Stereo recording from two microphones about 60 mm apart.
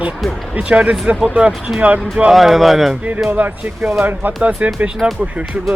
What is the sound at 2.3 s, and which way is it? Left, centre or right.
Speech, centre.